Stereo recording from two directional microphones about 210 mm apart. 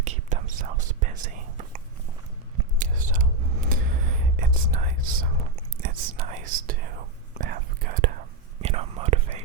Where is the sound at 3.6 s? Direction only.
40° right (ahead or behind).